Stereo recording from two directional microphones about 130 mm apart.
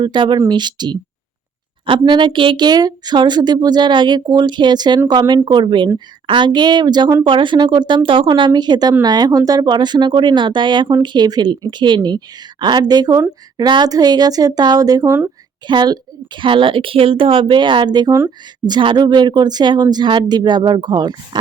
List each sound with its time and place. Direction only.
0.0 s speech: 35° right (ahead or behind)